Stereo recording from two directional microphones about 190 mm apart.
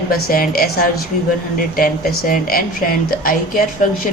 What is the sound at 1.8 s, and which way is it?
A woman's voice, 50° left (ahead or behind).